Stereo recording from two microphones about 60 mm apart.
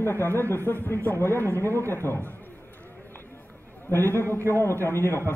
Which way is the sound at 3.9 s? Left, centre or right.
Left.